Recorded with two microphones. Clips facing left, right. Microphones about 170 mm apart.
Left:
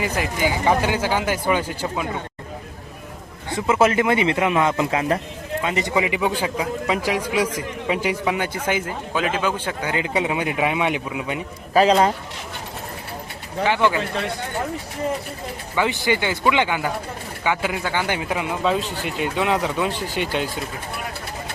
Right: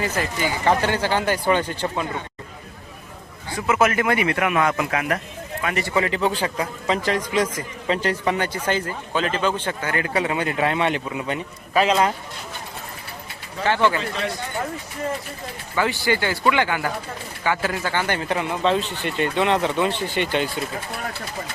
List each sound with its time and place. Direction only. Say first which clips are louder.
0.0 s a man's voice: left 2 dB; 15° left (ahead or behind)
3.5 s a man's voice: left 2 dB; 25° left (ahead or behind); by 11.4 s 10° left (ahead or behind)
11.7 s speech: left 3 dB; 35° left (ahead or behind)
13.7 s a man's voice: even; 15° left (ahead or behind)
15.7 s a man's voice: left 1 dB; 20° left (ahead or behind)
18.8 s speech: left 1 dB; 40° left (ahead or behind)
19.0 s speech: right 2 dB; 5° left (ahead or behind)